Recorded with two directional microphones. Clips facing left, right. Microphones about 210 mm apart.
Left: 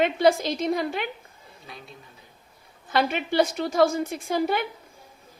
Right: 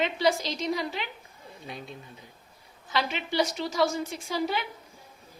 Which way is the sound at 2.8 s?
55° left (ahead or behind).